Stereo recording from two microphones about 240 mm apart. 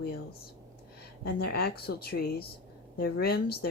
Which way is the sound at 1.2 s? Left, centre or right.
Left.